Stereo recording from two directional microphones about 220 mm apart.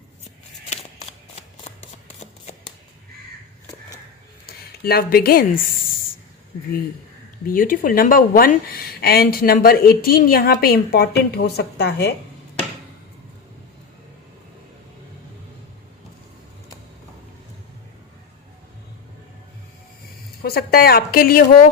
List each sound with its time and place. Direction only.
4.4 s speech: 45° left (ahead or behind)
7.4 s a woman's voice: 40° left (ahead or behind)
20.4 s a woman's voice: 45° left (ahead or behind)